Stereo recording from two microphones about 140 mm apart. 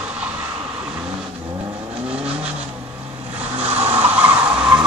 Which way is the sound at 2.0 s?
10° right (ahead or behind).